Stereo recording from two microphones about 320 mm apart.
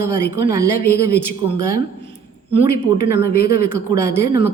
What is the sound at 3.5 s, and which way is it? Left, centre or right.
Speech, centre.